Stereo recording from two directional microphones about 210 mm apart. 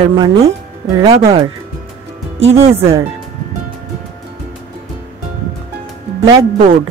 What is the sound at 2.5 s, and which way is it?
Speech, 15° right (ahead or behind).